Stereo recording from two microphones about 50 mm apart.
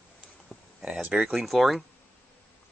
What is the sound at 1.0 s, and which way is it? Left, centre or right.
Speech, right.